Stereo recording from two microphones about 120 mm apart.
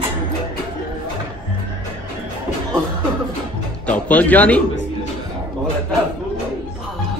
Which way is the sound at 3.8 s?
10° left (ahead or behind).